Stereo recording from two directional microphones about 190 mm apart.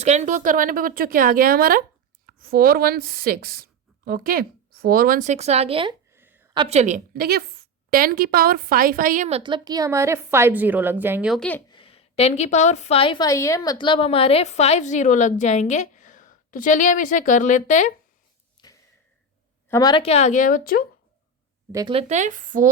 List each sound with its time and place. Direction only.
0.0 s a woman's voice: 35° right (ahead or behind)
6.1 s a sound: 10° right (ahead or behind)
6.5 s a woman's voice: 30° right (ahead or behind)
9.4 s a woman's voice: 20° right (ahead or behind); by 11.6 s 5° left (ahead or behind)
11.7 s a woman's voice: 30° left (ahead or behind)
18.6 s a sound: 25° left (ahead or behind)
19.6 s a woman's voice: 20° left (ahead or behind); by 20.8 s 50° left (ahead or behind)
21.7 s a woman's voice: 20° right (ahead or behind)
21.9 s a woman's voice: 35° right (ahead or behind)